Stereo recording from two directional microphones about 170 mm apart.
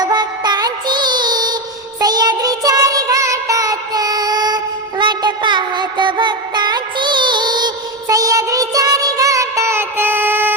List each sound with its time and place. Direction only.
0.0 s music: 25° right (ahead or behind)